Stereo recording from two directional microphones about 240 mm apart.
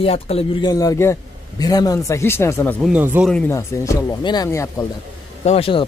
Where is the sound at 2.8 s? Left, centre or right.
Centre.